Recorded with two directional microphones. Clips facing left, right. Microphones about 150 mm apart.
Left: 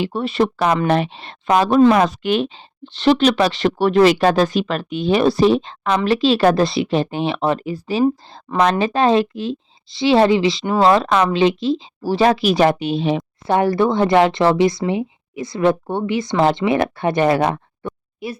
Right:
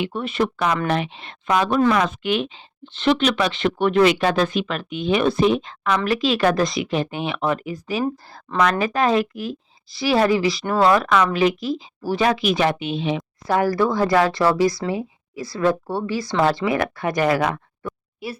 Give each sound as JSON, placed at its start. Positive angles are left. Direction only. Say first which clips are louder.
{"t": 0.0, "sound": "speech", "louder": "left 4 dB", "side_deg": 30}
{"t": 8.5, "sound": "speech", "louder": "left 3 dB", "side_deg": 10}
{"t": 8.8, "sound": "speech", "louder": "left 4 dB", "side_deg": 30}
{"t": 13.6, "sound": "speech", "louder": "left 3 dB", "side_deg": 25}